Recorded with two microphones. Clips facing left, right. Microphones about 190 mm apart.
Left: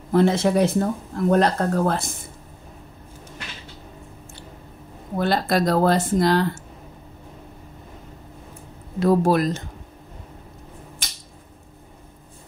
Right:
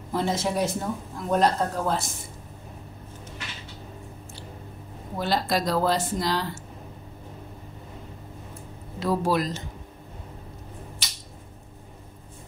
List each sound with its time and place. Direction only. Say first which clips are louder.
0.1 s speech: left 8 dB; 60° left (ahead or behind)
5.1 s speech: left 4 dB; 55° left (ahead or behind)
9.0 s speech: left 6 dB; 50° left (ahead or behind)
11.0 s a sound: left 1 dB; 50° left (ahead or behind)